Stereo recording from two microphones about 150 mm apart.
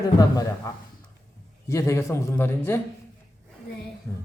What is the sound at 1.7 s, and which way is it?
A man's voice, 20° left (ahead or behind).